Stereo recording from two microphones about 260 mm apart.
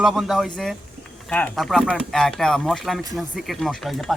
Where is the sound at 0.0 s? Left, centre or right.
Centre.